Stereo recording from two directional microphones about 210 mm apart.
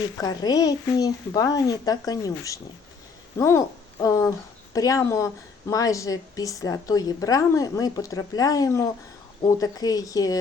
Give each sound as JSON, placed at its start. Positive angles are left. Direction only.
{"t": 0.2, "sound": "speech", "side_deg": 15}